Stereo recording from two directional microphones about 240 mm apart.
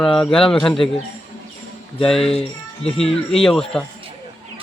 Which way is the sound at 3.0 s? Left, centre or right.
Centre.